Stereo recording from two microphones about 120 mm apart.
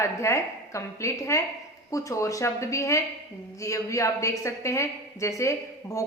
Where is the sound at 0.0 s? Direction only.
25° left (ahead or behind).